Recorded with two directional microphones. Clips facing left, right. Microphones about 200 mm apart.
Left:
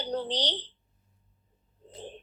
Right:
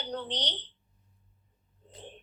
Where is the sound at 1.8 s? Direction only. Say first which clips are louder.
Left 5 dB; 35° left (ahead or behind).